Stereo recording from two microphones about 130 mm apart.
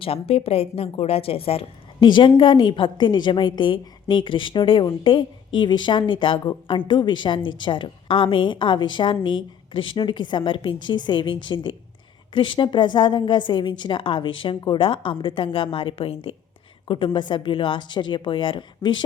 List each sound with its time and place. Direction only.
0.0 s a woman's voice: 50° left (ahead or behind)